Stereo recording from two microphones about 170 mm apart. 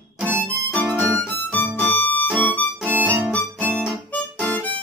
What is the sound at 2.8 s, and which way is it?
Music, 10° right (ahead or behind).